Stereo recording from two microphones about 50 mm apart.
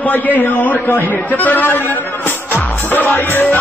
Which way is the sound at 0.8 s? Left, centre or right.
Left.